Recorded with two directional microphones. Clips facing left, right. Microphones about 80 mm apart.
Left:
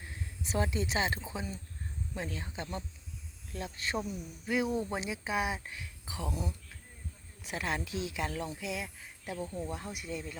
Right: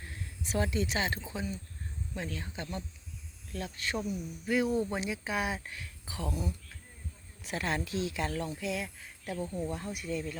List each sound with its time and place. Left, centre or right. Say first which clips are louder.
0.0 s speech: even; centre
4.4 s speech: right 2 dB; centre
7.4 s speech: right 2 dB; centre